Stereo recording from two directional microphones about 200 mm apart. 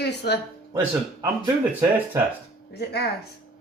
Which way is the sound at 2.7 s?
55° left (ahead or behind).